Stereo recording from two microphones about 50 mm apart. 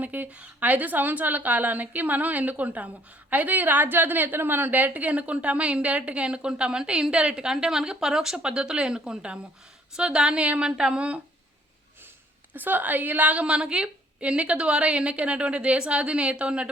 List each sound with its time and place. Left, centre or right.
0.0 s a woman's voice: right
12.5 s a woman's voice: right